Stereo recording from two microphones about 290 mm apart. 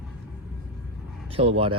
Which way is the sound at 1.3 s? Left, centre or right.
Centre.